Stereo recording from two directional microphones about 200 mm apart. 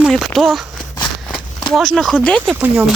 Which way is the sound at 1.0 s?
Centre (ahead or behind).